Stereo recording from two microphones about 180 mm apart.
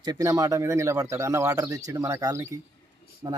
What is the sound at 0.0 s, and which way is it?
Speech, 20° right (ahead or behind).